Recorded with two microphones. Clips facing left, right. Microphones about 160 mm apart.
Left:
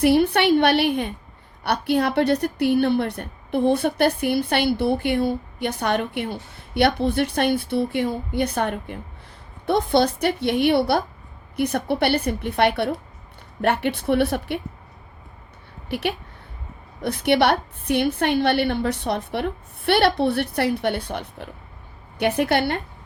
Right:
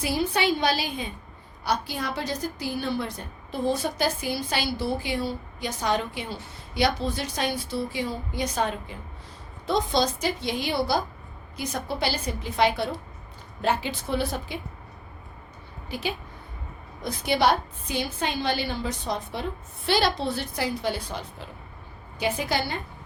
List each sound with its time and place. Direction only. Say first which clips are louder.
0.0 s a woman's voice: left 8 dB; 65° left (ahead or behind)
15.9 s a woman's voice: left 5 dB; 65° left (ahead or behind)